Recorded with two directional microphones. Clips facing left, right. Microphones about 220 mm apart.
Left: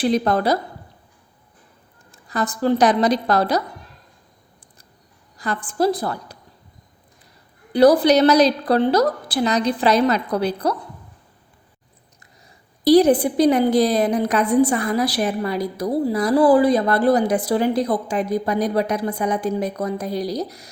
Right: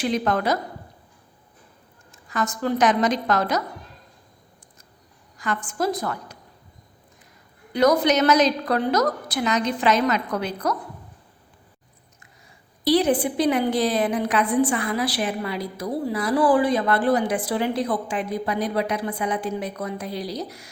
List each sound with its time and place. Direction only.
0.0 s a woman's voice: 35° left (ahead or behind)
2.1 s a woman's voice: 35° left (ahead or behind)
5.4 s a woman's voice: 35° left (ahead or behind)
7.7 s a woman's voice: 35° left (ahead or behind)
12.8 s a woman's voice: 40° left (ahead or behind)